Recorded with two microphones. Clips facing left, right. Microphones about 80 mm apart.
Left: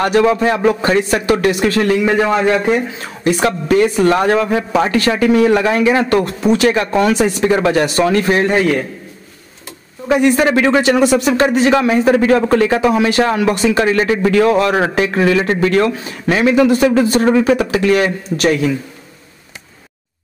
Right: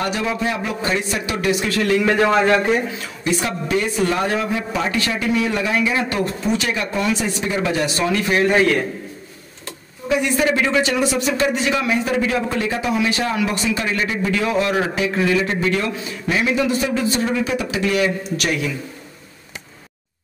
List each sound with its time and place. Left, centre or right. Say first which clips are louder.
0.0 s speech: left 9 dB; left
1.9 s a man's voice: even; centre
2.6 s speech: left 3 dB; left
3.3 s speech: left 9 dB; left
3.9 s speech: left 7 dB; left
10.0 s speech: left 6 dB; left
12.8 s speech: left 7 dB; left
18.4 s a man's voice: left 10 dB; left